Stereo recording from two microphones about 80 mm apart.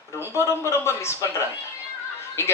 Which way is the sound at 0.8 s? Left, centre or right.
Left.